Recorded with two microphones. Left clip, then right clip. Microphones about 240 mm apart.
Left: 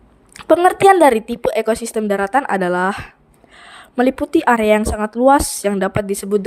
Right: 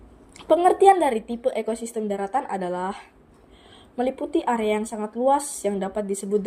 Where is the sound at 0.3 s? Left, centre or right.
Left.